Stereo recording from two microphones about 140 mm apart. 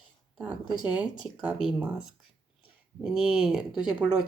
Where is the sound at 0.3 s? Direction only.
5° right (ahead or behind).